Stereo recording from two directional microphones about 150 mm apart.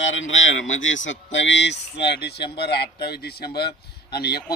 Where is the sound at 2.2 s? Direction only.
90° left.